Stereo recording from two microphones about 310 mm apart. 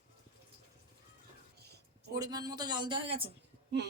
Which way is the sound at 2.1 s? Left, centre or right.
Centre.